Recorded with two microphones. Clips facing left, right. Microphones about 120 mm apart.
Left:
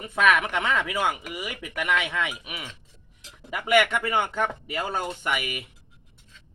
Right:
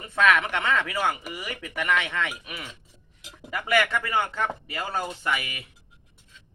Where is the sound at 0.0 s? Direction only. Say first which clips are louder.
Even; 15° left (ahead or behind).